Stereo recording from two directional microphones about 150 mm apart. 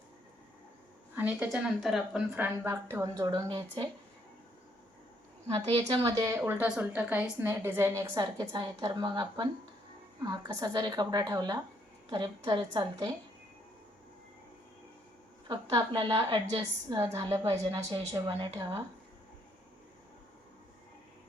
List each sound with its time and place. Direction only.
1.1 s a woman's voice: 10° right (ahead or behind); by 3.8 s 25° right (ahead or behind)
5.5 s a woman's voice: 40° right (ahead or behind)
6.1 s a woman's voice: 20° right (ahead or behind)
15.4 s a woman's voice: 30° right (ahead or behind)